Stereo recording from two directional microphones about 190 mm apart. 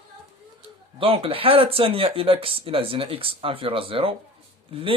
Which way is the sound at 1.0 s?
30° right (ahead or behind).